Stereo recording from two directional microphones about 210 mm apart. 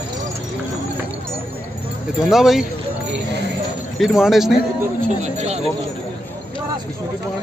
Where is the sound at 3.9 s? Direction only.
Centre (ahead or behind).